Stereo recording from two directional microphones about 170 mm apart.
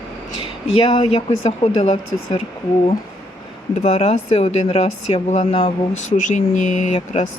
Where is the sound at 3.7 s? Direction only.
40° left (ahead or behind).